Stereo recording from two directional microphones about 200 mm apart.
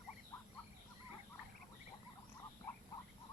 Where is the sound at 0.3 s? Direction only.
15° left (ahead or behind).